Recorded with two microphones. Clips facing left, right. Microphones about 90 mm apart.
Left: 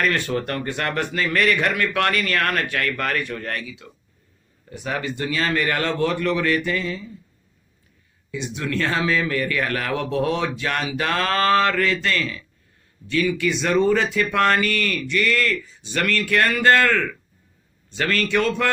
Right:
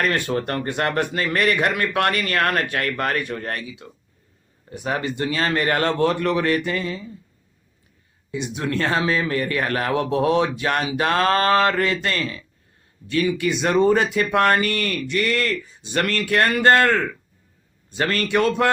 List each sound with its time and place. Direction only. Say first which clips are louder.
0.0 s speech: right 1 dB; 35° right (ahead or behind)
4.9 s speech: right 2 dB; 40° right (ahead or behind)
8.5 s speech: right 1 dB; 35° right (ahead or behind)
14.3 s speech: right 1 dB; 20° right (ahead or behind)
14.6 s speech: even; 40° right (ahead or behind)